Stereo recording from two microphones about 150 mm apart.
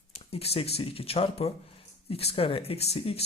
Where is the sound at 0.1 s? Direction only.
40° left (ahead or behind).